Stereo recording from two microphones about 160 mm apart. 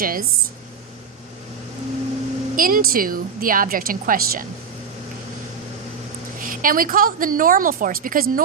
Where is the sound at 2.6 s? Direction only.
60° right (ahead or behind).